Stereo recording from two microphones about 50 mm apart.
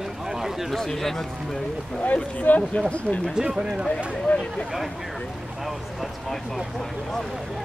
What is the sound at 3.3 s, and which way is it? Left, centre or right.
Speech, centre.